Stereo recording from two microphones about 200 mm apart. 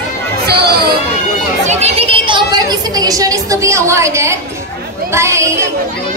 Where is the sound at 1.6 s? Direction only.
30° right (ahead or behind); by 5.7 s 15° right (ahead or behind).